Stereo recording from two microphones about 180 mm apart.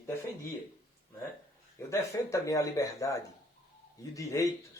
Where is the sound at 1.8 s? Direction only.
15° left (ahead or behind).